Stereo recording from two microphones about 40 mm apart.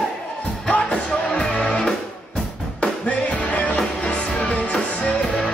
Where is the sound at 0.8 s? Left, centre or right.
Left.